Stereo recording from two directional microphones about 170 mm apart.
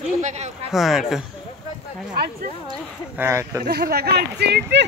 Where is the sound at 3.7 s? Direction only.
65° right (ahead or behind).